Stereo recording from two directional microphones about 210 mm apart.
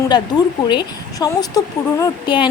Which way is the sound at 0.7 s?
20° left (ahead or behind).